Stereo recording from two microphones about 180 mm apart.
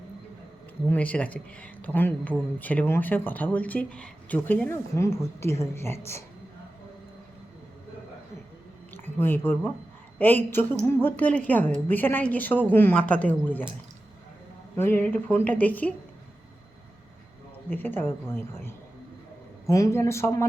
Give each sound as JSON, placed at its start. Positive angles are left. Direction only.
{"t": 0.9, "sound": "speech", "side_deg": 10}
{"t": 9.1, "sound": "speech", "side_deg": 10}
{"t": 14.8, "sound": "speech", "side_deg": 10}
{"t": 17.7, "sound": "speech", "side_deg": 10}